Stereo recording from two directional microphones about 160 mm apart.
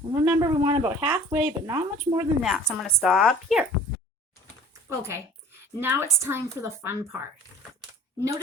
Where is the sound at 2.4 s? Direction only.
Centre (ahead or behind).